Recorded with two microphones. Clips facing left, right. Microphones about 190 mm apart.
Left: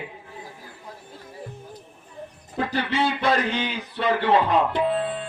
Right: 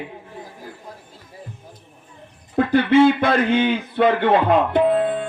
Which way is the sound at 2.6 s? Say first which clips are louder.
Right 11 dB; 55° right (ahead or behind).